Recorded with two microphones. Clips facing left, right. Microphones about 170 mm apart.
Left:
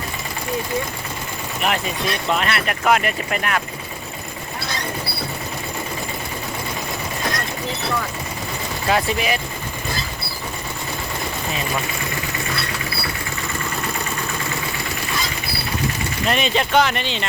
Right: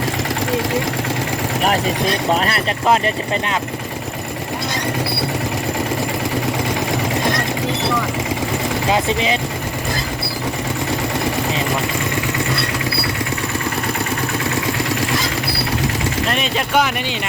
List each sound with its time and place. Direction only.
2.3 s speech: 35° right (ahead or behind)
8.9 s speech: 20° right (ahead or behind)
16.3 s speech: centre (ahead or behind)